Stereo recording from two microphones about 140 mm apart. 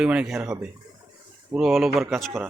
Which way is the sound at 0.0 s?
5° right (ahead or behind).